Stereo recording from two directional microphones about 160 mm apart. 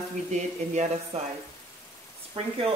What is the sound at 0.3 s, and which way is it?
Speech, 45° right (ahead or behind).